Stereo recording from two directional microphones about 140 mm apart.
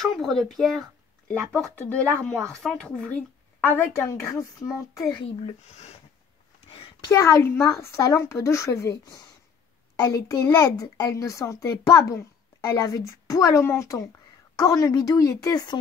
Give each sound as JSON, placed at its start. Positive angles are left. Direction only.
{"t": 0.0, "sound": "a woman's voice", "side_deg": 0}
{"t": 5.3, "sound": "speech", "side_deg": 45}
{"t": 7.1, "sound": "speech", "side_deg": 20}